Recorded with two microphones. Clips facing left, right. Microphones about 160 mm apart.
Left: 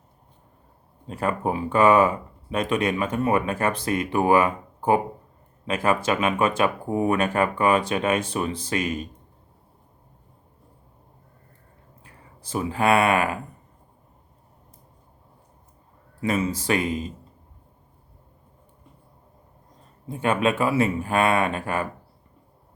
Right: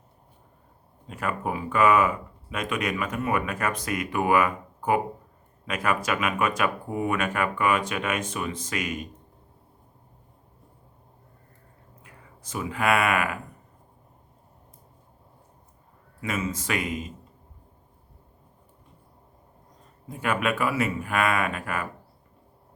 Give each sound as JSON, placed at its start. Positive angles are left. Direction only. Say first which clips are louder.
{"t": 1.0, "sound": "speech", "louder": "left 4 dB", "side_deg": 30}
{"t": 12.0, "sound": "speech", "louder": "left 2 dB", "side_deg": 30}
{"t": 16.2, "sound": "speech", "louder": "left 6 dB", "side_deg": 35}
{"t": 20.1, "sound": "speech", "louder": "left 4 dB", "side_deg": 25}